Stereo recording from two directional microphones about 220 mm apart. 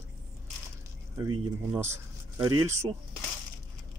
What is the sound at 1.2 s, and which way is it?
Speech, 10° right (ahead or behind).